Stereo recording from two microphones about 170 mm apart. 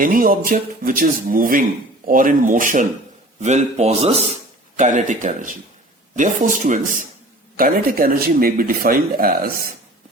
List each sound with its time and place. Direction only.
0.0 s speech: 60° right (ahead or behind)